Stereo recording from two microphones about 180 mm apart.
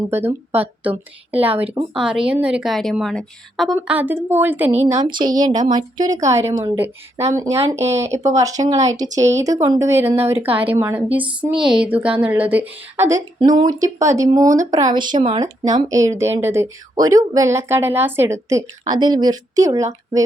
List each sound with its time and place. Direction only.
0.1 s a woman's voice: 10° right (ahead or behind)
3.8 s a woman's voice: 10° right (ahead or behind)
4.9 s a woman's voice: 20° right (ahead or behind)